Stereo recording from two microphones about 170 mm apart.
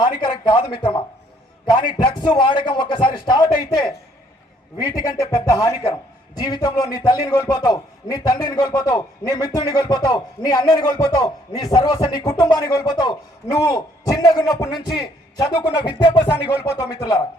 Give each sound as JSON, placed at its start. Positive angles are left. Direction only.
{"t": 0.0, "sound": "a man's voice", "side_deg": 25}